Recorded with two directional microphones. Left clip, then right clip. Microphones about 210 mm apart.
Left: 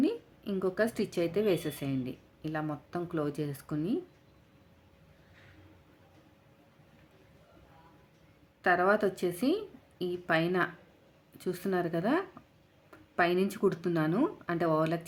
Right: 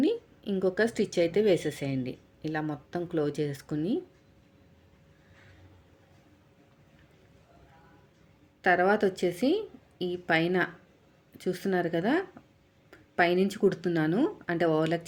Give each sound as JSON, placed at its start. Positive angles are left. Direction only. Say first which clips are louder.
{"t": 0.0, "sound": "a woman's voice", "louder": "right 3 dB", "side_deg": -10}
{"t": 8.6, "sound": "a woman's voice", "louder": "right 2 dB", "side_deg": -10}